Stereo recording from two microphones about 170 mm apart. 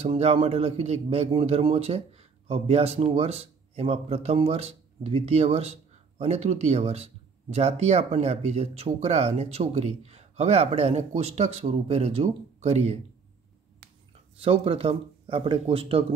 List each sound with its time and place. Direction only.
0.0 s a man's voice: 35° right (ahead or behind)
14.4 s a man's voice: 30° right (ahead or behind)